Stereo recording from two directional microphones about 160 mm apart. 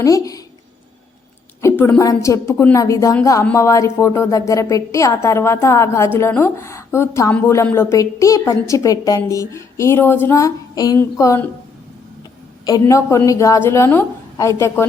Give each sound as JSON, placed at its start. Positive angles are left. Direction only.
{"t": 0.0, "sound": "speech", "side_deg": 20}
{"t": 1.6, "sound": "a woman's voice", "side_deg": 15}
{"t": 12.6, "sound": "a woman's voice", "side_deg": 20}